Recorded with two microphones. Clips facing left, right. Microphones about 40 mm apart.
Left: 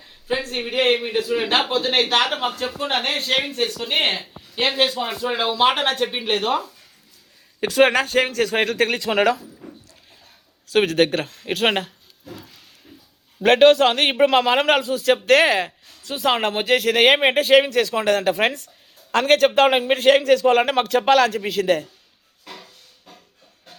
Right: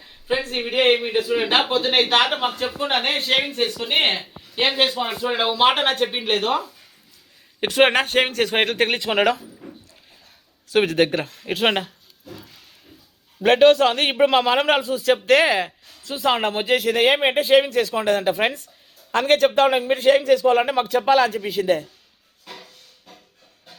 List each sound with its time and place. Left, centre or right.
0.0 s a man's voice: centre
7.6 s speech: right
10.7 s speech: left
13.4 s speech: left
16.6 s speech: left
22.4 s a sound: centre